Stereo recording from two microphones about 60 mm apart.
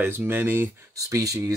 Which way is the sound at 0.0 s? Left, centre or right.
Right.